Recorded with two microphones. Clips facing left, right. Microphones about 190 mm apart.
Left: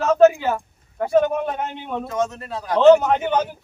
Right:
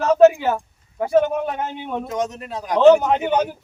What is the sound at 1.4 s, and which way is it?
A man's voice, 10° right (ahead or behind).